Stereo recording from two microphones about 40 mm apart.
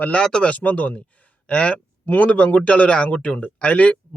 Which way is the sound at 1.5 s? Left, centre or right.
Left.